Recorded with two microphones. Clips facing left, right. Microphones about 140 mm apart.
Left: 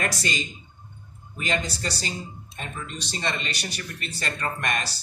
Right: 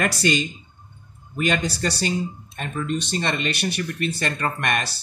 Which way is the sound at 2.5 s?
50° right (ahead or behind).